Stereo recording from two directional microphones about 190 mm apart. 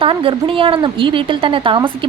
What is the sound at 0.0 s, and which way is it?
A woman's voice, 30° right (ahead or behind).